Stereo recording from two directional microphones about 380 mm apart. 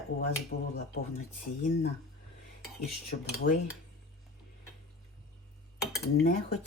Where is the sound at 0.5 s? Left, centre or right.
Left.